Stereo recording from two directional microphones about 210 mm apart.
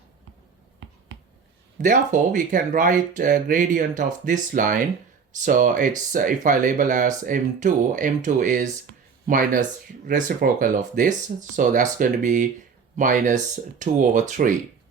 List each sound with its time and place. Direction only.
1.8 s speech: 35° right (ahead or behind)